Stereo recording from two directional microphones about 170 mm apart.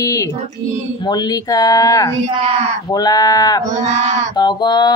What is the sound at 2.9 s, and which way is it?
Speech, 25° left (ahead or behind).